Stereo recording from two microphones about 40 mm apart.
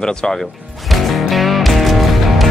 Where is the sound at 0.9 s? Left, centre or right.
Centre.